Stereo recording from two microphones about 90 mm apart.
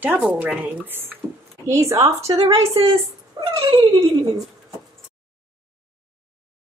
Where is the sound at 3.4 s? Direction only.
85° right.